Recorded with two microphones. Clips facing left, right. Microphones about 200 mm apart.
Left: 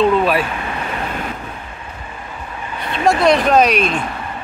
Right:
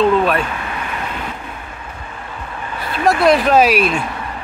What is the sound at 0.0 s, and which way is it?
Vehicle, centre (ahead or behind).